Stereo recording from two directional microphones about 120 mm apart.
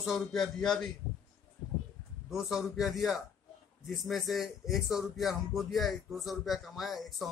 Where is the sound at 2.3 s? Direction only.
5° right (ahead or behind).